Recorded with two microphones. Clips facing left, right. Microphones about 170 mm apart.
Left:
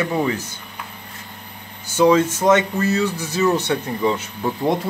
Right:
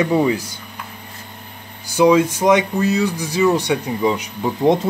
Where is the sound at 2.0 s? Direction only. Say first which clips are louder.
Right 2 dB; 10° right (ahead or behind).